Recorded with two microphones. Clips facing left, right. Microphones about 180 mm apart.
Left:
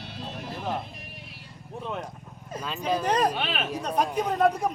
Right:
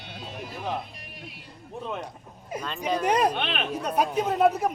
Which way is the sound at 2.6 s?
5° left (ahead or behind).